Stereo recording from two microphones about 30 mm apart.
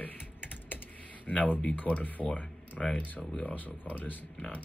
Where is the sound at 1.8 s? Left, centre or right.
Left.